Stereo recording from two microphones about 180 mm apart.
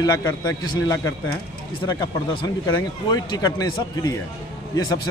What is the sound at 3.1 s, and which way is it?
A man's voice, 20° left (ahead or behind).